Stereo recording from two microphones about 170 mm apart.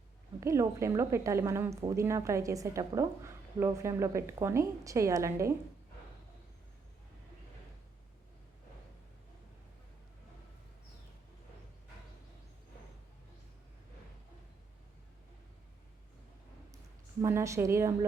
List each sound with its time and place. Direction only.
0.3 s a woman's voice: 20° right (ahead or behind)
17.2 s a woman's voice: 15° right (ahead or behind)